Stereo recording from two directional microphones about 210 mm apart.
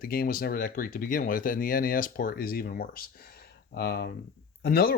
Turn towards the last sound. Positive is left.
turn(degrees=45)  # may be behind; listen again after turning